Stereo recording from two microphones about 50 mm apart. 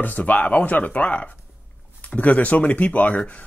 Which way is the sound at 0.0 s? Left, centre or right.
Left.